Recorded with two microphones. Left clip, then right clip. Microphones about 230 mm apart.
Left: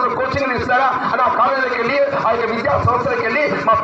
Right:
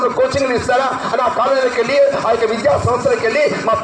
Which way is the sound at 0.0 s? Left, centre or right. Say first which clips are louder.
Right 3 dB; right.